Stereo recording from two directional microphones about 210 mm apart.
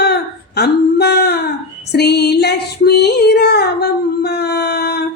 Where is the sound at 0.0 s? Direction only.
50° left (ahead or behind).